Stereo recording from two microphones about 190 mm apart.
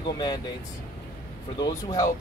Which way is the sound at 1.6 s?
20° left (ahead or behind).